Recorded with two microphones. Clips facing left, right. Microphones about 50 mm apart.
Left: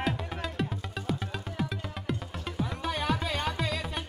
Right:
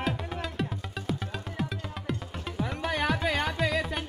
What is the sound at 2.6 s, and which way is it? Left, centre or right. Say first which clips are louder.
Music: right 3 dB; right.